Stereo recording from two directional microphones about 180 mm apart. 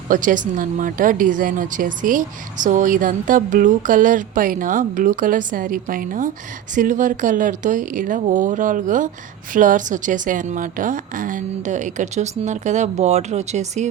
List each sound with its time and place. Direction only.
0.1 s speech: 45° right (ahead or behind)